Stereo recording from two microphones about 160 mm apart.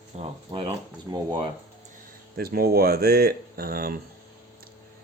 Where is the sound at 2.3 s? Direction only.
70° right (ahead or behind).